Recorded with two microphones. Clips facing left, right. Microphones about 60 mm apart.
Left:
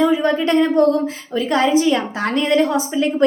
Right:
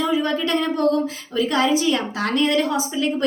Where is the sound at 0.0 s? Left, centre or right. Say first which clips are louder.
Left 5 dB; left.